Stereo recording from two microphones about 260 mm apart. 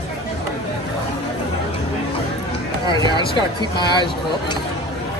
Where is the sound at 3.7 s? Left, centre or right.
Centre.